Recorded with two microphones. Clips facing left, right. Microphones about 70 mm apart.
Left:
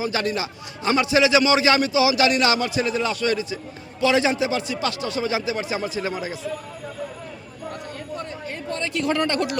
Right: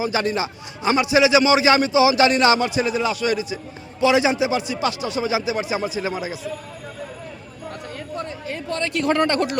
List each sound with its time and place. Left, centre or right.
0.0 s a man's voice: right
8.4 s a woman's voice: right